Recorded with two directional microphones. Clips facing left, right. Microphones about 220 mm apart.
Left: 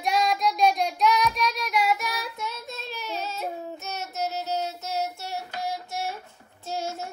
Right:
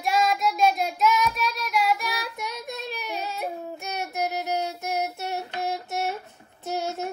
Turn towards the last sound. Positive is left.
turn(degrees=-20)  # may be behind; listen again after turning